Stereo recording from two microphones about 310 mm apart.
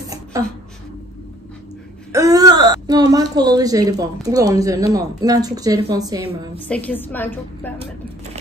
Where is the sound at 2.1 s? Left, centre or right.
Centre.